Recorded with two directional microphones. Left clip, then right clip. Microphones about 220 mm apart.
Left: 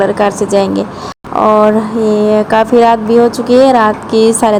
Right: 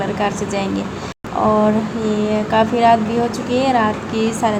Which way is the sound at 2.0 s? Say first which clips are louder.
Left 11 dB; 25° left (ahead or behind).